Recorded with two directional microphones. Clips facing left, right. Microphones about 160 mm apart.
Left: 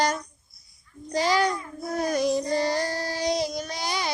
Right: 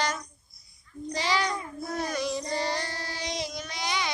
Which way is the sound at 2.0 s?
45° left (ahead or behind).